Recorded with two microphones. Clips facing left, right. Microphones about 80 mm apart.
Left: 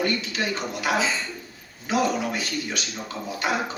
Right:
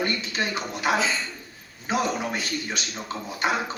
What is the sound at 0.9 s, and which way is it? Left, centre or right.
Speech, centre.